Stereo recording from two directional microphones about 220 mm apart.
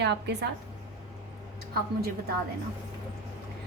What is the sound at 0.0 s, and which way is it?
Speech, 50° right (ahead or behind).